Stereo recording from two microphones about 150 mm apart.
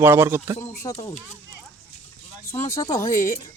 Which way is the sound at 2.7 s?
20° left (ahead or behind).